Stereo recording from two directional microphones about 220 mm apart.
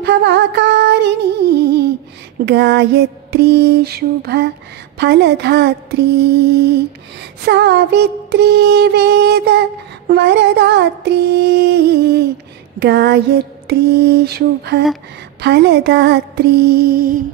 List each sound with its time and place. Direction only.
0.0 s music: 50° right (ahead or behind)
2.4 s mantra: 50° right (ahead or behind)